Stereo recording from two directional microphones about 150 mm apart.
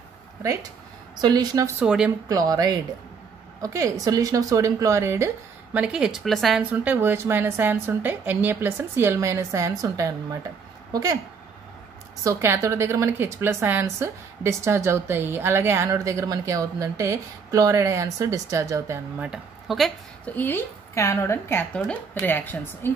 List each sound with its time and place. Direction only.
0.4 s a woman's voice: 20° right (ahead or behind)
1.8 s a woman's voice: 10° right (ahead or behind)
2.2 s a woman's voice: 25° right (ahead or behind)
12.2 s a woman's voice: 20° right (ahead or behind); by 19.9 s 5° right (ahead or behind)
20.2 s a woman's voice: 10° left (ahead or behind)